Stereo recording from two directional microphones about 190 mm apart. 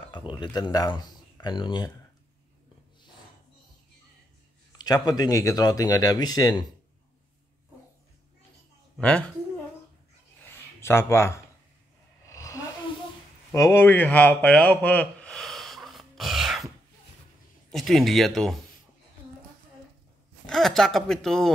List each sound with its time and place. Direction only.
0.3 s speech: 20° left (ahead or behind)
4.7 s speech: 20° left (ahead or behind)
8.9 s speech: 5° left (ahead or behind)
10.4 s a sound: 10° left (ahead or behind)
17.6 s speech: centre (ahead or behind)
20.4 s speech: centre (ahead or behind)